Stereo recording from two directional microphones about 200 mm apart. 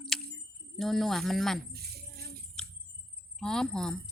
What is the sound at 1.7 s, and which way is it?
Keys jangling, 50° right (ahead or behind).